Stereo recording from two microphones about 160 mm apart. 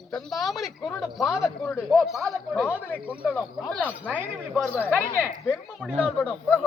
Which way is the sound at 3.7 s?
10° left (ahead or behind).